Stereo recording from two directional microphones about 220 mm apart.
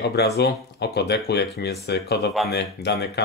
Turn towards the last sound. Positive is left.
turn(degrees=50)  # may be behind; listen again after turning